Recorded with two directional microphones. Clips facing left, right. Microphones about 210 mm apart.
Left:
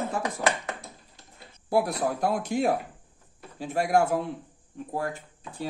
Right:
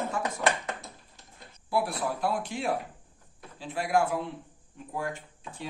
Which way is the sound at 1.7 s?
45° left (ahead or behind).